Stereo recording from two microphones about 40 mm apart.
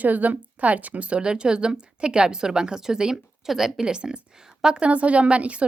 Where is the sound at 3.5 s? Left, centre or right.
Centre.